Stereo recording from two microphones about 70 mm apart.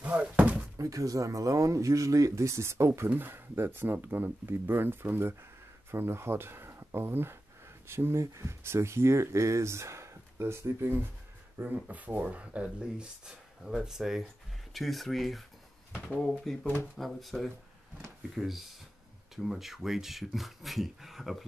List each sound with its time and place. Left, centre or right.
0.0 s a sound: centre
0.7 s speech: right
3.2 s speech: right; by 15.4 s centre
16.1 s speech: centre
16.9 s speech: centre